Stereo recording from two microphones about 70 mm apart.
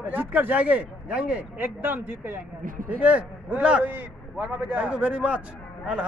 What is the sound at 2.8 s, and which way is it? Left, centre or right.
Speech, centre.